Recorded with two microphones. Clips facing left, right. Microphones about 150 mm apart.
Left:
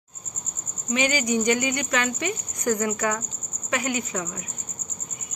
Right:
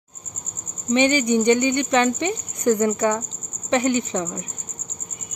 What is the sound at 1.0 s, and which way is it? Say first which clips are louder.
Speech: right 5 dB; 30° right (ahead or behind).